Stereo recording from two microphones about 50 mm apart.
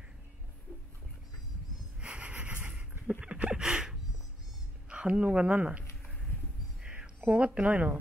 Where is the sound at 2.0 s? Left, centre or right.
Right.